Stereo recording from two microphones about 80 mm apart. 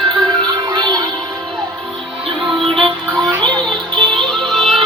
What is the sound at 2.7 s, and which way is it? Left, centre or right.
Music, centre.